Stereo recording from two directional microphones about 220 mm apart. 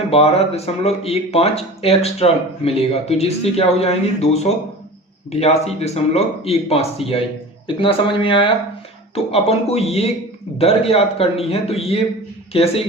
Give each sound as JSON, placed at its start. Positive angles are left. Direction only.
{"t": 0.1, "sound": "speech", "side_deg": 30}